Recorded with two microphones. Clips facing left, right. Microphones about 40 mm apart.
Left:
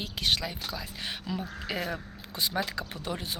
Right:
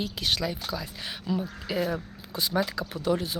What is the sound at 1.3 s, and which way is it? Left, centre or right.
Speech, left.